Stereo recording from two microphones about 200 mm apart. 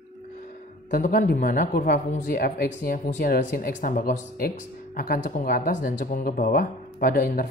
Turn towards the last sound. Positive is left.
turn(degrees=45)  # may be behind; listen again after turning